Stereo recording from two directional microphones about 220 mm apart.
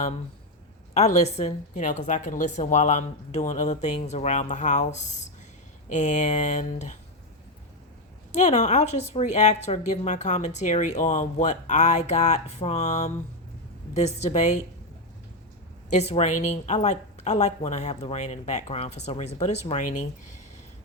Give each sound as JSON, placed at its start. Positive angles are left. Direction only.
{"t": 0.9, "sound": "a woman's voice", "side_deg": 30}
{"t": 8.3, "sound": "a woman's voice", "side_deg": 30}
{"t": 15.9, "sound": "a woman's voice", "side_deg": 30}